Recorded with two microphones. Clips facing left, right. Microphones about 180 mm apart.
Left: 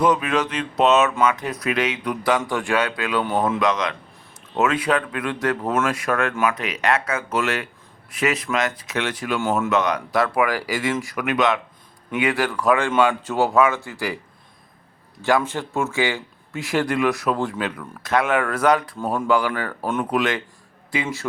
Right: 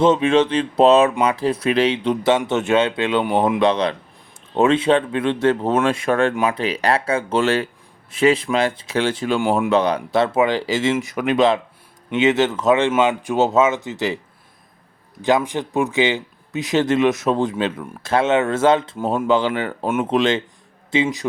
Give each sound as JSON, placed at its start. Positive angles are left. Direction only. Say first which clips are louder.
{"t": 0.0, "sound": "speech", "louder": "right 5 dB", "side_deg": -25}
{"t": 15.2, "sound": "speech", "louder": "right 2 dB", "side_deg": -20}